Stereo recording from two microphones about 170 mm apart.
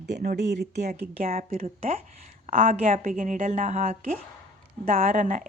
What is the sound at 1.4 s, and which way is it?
A woman's voice, 40° right (ahead or behind).